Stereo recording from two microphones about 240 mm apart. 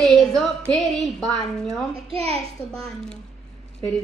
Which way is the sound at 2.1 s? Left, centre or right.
Right.